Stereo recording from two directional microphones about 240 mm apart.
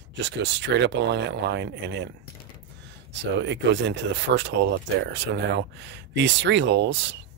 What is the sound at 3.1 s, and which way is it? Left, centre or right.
Speech, right.